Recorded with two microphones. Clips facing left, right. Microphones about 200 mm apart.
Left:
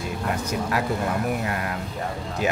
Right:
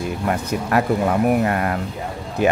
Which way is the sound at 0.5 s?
60° right (ahead or behind).